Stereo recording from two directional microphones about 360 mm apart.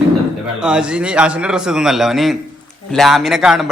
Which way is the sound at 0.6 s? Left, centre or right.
Centre.